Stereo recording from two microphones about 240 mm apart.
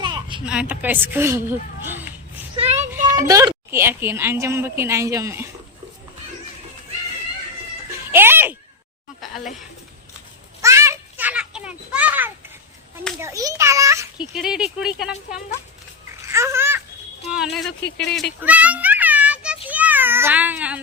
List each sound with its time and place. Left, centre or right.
0.0 s a sound: centre
0.4 s a woman's voice: centre
2.6 s child singing: right
3.1 s a woman's voice: centre
8.1 s a sound: centre
10.6 s children playing: centre
13.1 s a woman's voice: centre
16.2 s babbling: centre
17.3 s speech: centre
17.8 s speech: left
18.1 s a sound: centre
19.6 s meow: centre